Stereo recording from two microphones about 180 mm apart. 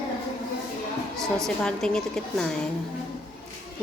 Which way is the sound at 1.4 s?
5° left (ahead or behind).